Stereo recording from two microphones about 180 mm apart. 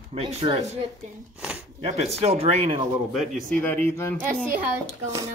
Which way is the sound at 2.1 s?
35° right (ahead or behind).